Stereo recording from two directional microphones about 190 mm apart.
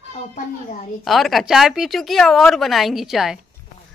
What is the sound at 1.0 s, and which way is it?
Speech, centre (ahead or behind).